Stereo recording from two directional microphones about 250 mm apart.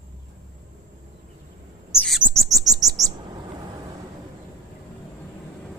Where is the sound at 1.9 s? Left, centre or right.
Centre.